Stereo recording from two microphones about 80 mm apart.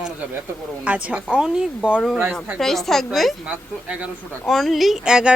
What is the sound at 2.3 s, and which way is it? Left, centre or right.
A woman's voice, centre.